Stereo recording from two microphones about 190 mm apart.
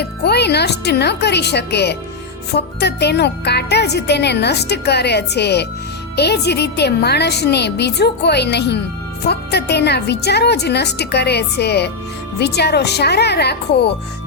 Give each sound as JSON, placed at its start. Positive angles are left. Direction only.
{"t": 0.0, "sound": "speech", "side_deg": 60}